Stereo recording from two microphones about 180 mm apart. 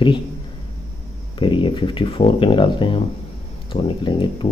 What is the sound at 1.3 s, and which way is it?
Speech, 25° left (ahead or behind).